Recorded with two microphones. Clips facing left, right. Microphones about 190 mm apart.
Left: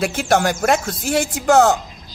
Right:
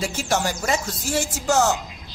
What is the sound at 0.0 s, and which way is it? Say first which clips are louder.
Speech: left 6 dB; 60° left (ahead or behind).